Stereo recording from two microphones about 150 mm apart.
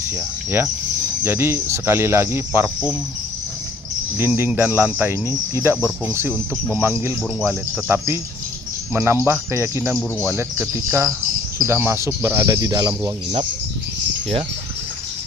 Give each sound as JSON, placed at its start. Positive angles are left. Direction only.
{"t": 0.1, "sound": "speech", "side_deg": -15}
{"t": 4.4, "sound": "speech", "side_deg": -10}